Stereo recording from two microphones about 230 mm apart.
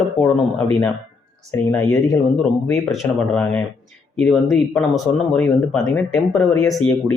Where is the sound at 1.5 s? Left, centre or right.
Centre.